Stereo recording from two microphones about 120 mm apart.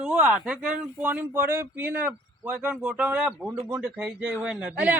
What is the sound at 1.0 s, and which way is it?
A man's voice, 15° right (ahead or behind).